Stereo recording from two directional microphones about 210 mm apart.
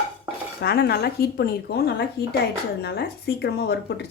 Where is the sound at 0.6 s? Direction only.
50° left (ahead or behind).